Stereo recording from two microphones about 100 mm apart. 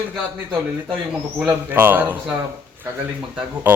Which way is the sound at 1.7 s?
20° right (ahead or behind).